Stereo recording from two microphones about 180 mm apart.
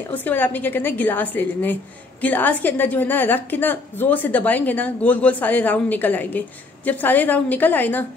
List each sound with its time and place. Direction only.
0.1 s a woman's voice: 10° left (ahead or behind)